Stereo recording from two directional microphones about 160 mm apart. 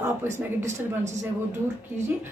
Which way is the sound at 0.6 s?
50° right (ahead or behind).